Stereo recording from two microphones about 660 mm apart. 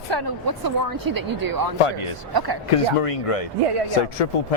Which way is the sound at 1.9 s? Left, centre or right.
Left.